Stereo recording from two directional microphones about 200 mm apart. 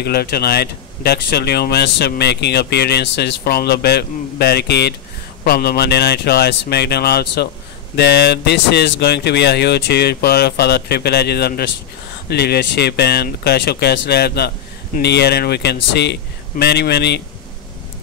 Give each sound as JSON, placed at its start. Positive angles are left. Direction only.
{"t": 0.0, "sound": "speech", "side_deg": 50}